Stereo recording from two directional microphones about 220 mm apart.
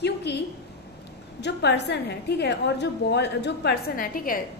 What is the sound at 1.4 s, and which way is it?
A woman's voice, 50° left (ahead or behind).